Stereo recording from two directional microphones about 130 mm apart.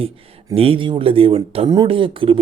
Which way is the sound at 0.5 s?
45° right (ahead or behind).